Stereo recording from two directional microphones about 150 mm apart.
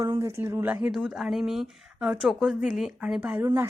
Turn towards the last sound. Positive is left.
turn(degrees=-10)  # may be behind; listen again after turning